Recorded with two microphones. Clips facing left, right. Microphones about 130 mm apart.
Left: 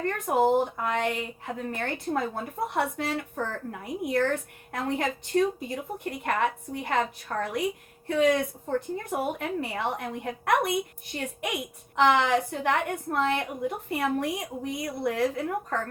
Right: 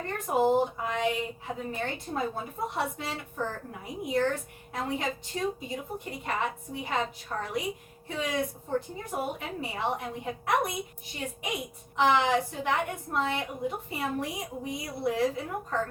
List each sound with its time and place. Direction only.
0.0 s a woman's voice: 60° left (ahead or behind)